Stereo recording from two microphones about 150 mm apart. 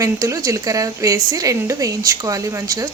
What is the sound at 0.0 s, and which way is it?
A woman's voice, 20° right (ahead or behind).